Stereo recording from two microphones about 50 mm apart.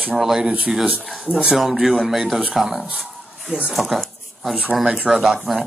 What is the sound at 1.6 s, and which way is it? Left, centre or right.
Speech, centre.